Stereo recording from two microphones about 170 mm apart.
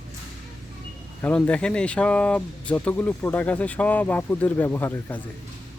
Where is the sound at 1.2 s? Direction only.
5° left (ahead or behind).